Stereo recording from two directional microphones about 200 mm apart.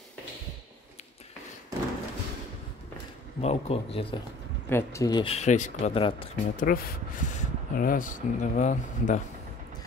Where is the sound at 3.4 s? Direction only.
30° left (ahead or behind).